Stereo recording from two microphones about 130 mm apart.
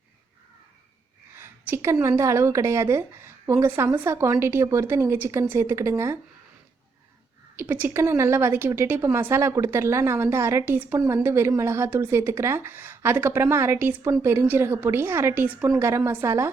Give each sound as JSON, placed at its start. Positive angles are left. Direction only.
{"t": 1.4, "sound": "a woman's voice", "side_deg": -20}
{"t": 7.5, "sound": "a woman's voice", "side_deg": -15}